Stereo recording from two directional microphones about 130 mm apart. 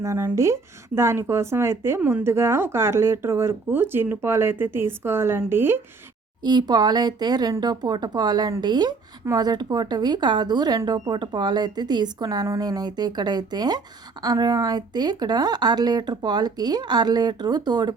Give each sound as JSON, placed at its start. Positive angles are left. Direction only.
{"t": 0.0, "sound": "speech", "side_deg": -25}
{"t": 6.4, "sound": "speech", "side_deg": -35}